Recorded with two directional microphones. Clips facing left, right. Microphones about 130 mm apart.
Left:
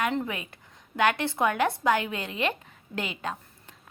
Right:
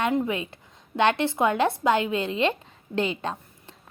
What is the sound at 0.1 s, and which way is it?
A woman's voice, 20° right (ahead or behind).